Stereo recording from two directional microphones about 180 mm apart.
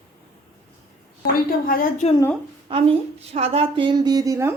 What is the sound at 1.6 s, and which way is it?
Speech, 50° left (ahead or behind).